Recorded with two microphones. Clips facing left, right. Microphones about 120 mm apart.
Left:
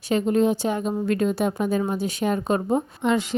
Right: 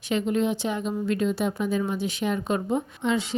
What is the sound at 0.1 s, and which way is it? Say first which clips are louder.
A woman's voice: left 4 dB; 40° left (ahead or behind).